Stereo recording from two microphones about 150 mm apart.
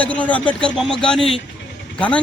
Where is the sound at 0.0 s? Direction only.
10° left (ahead or behind).